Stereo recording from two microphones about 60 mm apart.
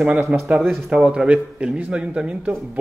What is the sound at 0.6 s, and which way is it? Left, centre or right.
A man's voice, centre.